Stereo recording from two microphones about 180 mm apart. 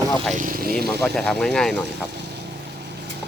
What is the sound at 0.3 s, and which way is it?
Speech, 50° right (ahead or behind).